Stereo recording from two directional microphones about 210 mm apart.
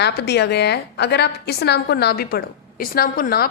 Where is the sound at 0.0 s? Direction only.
50° left (ahead or behind).